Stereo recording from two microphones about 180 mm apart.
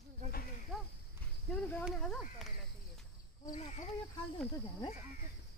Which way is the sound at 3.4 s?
45° left (ahead or behind).